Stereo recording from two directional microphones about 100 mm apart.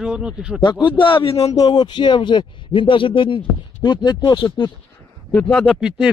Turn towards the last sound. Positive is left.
turn(degrees=-10)  # may be behind; listen again after turning